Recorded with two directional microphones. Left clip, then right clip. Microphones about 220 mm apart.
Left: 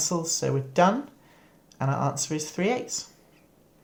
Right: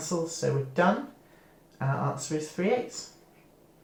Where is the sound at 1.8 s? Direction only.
55° left (ahead or behind).